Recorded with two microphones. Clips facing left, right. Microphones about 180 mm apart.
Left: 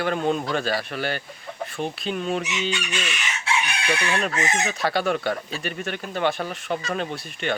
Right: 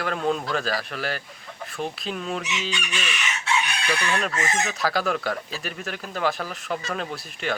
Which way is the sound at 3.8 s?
25° left (ahead or behind).